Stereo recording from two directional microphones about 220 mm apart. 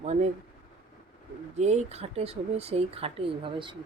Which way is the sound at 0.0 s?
30° right (ahead or behind).